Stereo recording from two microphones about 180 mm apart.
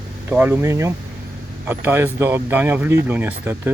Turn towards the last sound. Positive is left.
turn(degrees=-10)  # may be behind; listen again after turning